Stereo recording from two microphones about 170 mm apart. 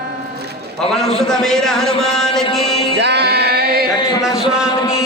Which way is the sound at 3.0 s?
75° right (ahead or behind).